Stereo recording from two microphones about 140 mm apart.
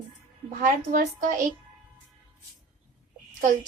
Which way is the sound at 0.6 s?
75° right (ahead or behind).